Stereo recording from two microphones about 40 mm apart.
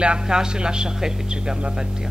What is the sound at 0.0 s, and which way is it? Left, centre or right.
Speech, right.